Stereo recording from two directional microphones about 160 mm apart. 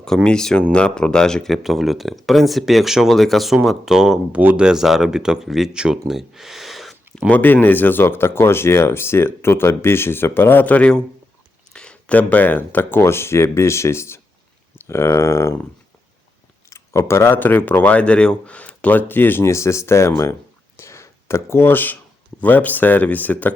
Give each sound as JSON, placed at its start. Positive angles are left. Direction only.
{"t": 0.0, "sound": "speech", "side_deg": 5}
{"t": 16.6, "sound": "speech", "side_deg": 20}
{"t": 20.7, "sound": "a sound", "side_deg": 15}
{"t": 22.4, "sound": "speech", "side_deg": 10}